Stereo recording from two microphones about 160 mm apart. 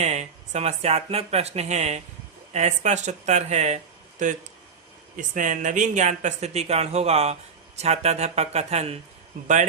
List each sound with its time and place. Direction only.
0.0 s speech: 45° right (ahead or behind)